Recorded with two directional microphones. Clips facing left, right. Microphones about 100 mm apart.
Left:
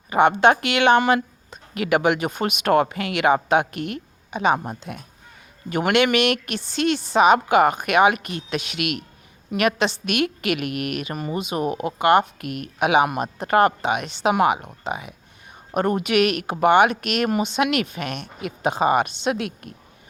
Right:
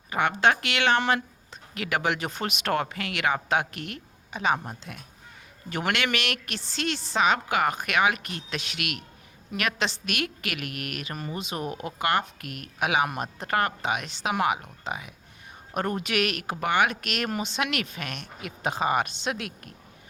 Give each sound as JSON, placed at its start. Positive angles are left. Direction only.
{"t": 0.1, "sound": "speech", "side_deg": 20}